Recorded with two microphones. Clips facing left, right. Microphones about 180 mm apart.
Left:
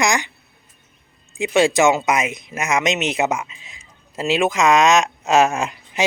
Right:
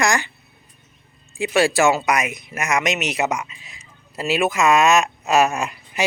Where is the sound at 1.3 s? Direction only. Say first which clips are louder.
Left 2 dB; 20° left (ahead or behind).